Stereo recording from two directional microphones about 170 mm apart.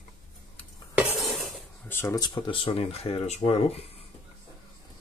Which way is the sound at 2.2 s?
30° left (ahead or behind).